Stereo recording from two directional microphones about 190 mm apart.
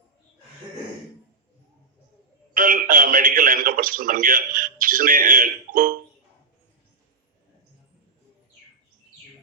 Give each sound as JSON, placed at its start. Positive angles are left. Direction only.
{"t": 2.5, "sound": "a man's voice", "side_deg": -45}